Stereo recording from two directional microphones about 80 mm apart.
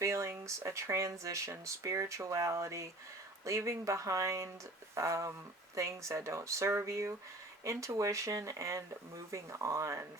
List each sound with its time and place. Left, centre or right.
0.0 s speech: right